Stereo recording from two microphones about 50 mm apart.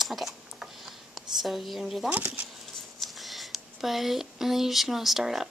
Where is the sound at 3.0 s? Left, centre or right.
Centre.